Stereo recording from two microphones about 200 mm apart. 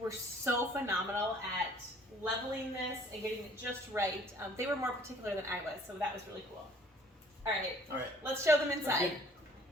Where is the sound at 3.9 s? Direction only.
10° right (ahead or behind).